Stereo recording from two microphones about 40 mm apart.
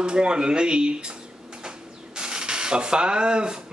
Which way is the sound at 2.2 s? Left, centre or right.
Centre.